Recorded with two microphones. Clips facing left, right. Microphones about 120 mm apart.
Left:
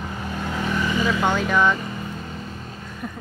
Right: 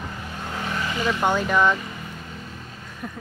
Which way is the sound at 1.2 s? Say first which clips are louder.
Right 2 dB; 5° right (ahead or behind).